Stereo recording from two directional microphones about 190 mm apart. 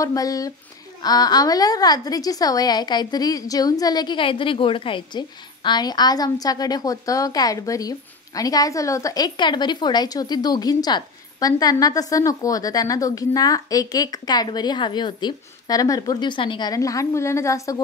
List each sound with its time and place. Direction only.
0.0 s a woman's voice: 20° left (ahead or behind)